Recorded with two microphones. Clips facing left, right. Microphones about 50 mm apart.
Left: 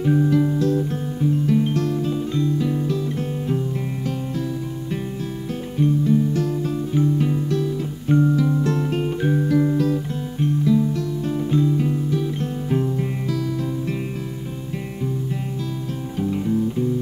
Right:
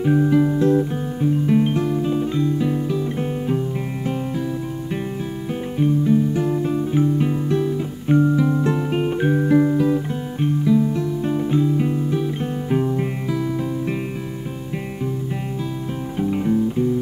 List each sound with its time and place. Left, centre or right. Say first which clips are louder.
0.0 s music: right 2 dB; centre
5.8 s music: right 1 dB; centre
16.2 s music: right 2 dB; right